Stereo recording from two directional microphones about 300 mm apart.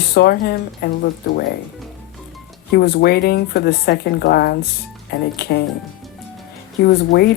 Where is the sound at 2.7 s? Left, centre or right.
Left.